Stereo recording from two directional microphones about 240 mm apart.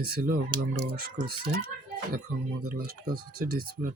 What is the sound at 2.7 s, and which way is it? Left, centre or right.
Speech, right.